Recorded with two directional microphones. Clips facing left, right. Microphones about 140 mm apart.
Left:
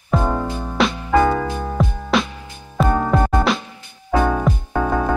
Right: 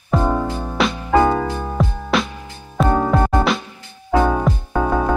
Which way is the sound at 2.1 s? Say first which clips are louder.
Left 1 dB; centre (ahead or behind).